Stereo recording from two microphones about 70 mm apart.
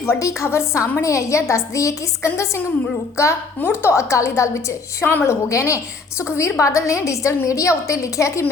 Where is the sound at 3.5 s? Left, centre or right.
Left.